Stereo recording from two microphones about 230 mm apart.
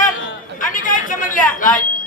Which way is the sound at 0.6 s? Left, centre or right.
Left.